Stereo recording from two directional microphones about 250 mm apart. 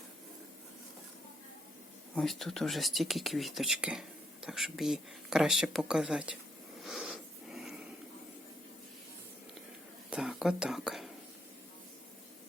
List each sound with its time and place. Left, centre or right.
2.1 s speech: centre
6.8 s a sound: centre
10.1 s speech: centre